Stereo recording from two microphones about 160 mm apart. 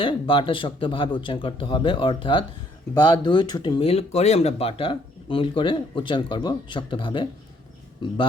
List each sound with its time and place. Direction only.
0.0 s speech: 35° left (ahead or behind)